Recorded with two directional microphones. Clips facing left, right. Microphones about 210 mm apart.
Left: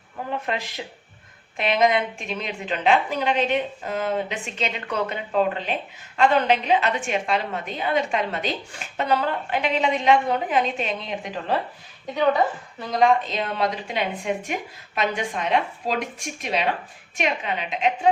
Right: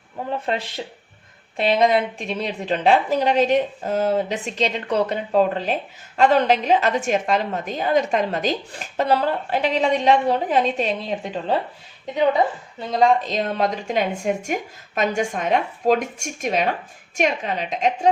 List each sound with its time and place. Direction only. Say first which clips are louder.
0.4 s a woman's voice: right 3 dB; 30° right (ahead or behind)
12.8 s a woman's voice: right 2 dB; 30° right (ahead or behind)